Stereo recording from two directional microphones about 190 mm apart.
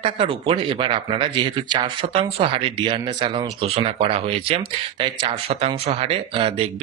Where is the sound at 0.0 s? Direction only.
30° right (ahead or behind).